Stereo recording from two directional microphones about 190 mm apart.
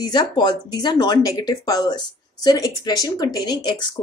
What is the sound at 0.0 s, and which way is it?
Speech, 20° left (ahead or behind).